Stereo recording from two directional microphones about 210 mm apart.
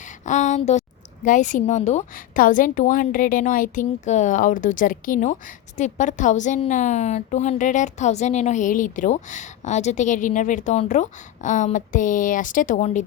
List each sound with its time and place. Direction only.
0.3 s a woman's voice: 35° left (ahead or behind)